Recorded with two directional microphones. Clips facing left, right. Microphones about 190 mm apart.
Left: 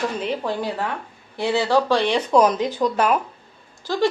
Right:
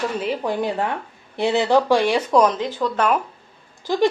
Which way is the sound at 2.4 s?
15° left (ahead or behind).